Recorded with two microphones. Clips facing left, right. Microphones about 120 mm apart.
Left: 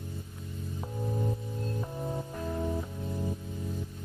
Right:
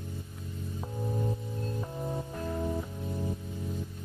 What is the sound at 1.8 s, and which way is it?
Music, centre (ahead or behind).